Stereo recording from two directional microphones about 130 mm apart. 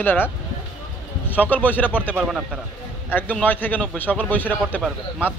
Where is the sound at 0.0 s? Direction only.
15° left (ahead or behind).